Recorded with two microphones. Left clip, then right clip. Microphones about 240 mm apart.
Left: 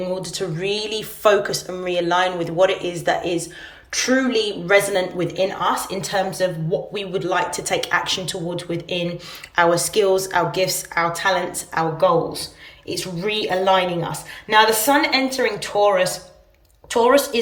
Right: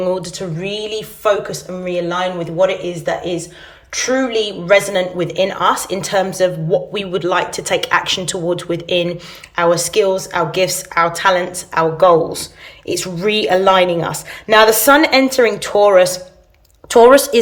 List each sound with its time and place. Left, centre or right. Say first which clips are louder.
0.0 s a woman's voice: right 7 dB; centre
0.3 s a woman's voice: right 1 dB; centre